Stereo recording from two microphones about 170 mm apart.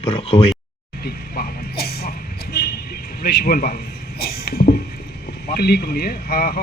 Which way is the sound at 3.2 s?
60° left (ahead or behind).